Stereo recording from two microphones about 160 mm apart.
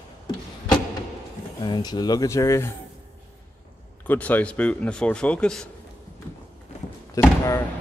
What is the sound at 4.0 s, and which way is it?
A man's voice, 10° left (ahead or behind).